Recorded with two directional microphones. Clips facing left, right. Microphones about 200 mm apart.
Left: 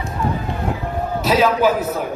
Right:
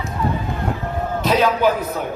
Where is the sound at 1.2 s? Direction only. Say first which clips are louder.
Left 1 dB; 5° left (ahead or behind).